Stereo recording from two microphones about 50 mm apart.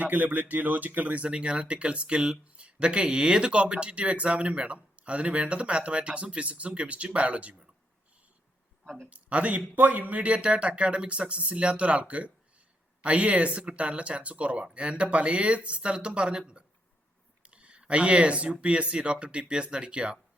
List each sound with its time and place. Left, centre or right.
0.0 s speech: right
8.8 s a sound: centre
9.0 s speech: right